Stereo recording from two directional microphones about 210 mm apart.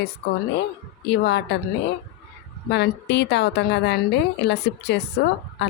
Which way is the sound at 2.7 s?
55° left (ahead or behind).